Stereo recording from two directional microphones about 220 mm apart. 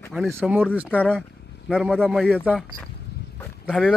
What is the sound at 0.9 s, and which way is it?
Speech, 5° left (ahead or behind).